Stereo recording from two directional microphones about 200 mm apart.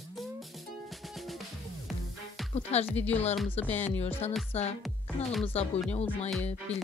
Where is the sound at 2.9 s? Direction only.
10° left (ahead or behind).